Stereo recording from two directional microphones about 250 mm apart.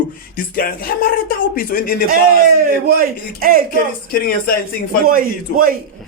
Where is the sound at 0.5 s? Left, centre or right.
Left.